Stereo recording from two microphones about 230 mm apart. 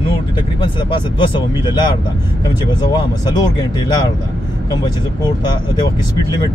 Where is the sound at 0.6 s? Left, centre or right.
Centre.